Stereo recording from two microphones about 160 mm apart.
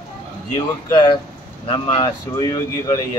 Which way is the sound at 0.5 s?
25° left (ahead or behind).